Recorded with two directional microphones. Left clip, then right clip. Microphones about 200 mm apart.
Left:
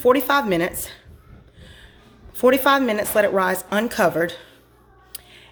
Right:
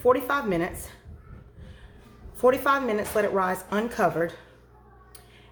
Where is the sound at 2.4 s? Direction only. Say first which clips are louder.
Left 5 dB; 40° left (ahead or behind).